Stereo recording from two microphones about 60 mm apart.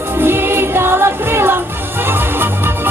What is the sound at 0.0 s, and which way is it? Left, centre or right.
Music, right.